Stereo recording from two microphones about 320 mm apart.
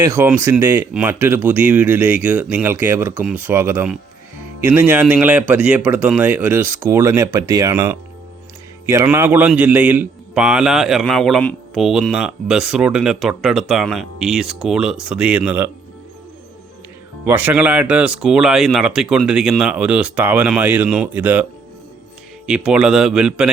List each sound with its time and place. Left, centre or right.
0.0 s a man's voice: centre
17.2 s a man's voice: centre
22.4 s a man's voice: centre